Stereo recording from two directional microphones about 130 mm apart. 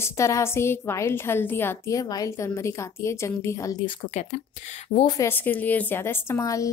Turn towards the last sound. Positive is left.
turn(degrees=25)  # may be behind; listen again after turning